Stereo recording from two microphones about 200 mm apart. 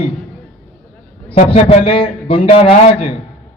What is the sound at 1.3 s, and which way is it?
A man's voice, 30° left (ahead or behind).